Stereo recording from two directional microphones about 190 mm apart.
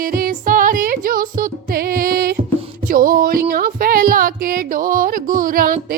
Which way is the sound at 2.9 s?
50° right (ahead or behind).